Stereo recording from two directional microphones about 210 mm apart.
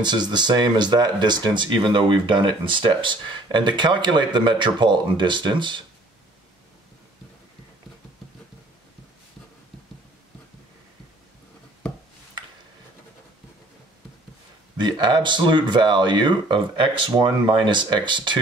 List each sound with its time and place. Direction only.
0.0 s speech: 20° right (ahead or behind)
14.8 s speech: 20° right (ahead or behind)